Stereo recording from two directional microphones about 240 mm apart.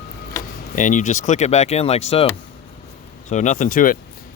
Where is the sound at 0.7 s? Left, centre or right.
Left.